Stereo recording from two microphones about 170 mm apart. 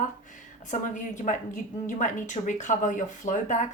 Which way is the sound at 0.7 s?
45° left (ahead or behind).